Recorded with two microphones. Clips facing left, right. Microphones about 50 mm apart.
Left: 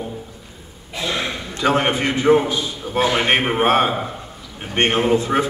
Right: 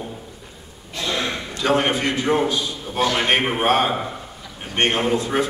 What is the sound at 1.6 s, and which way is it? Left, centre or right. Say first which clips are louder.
A man's voice: left 2 dB; centre.